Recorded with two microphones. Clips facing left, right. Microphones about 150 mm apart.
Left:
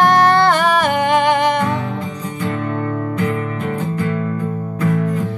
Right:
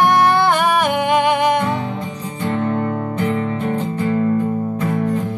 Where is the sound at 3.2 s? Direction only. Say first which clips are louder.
Right 1 dB; 30° right (ahead or behind).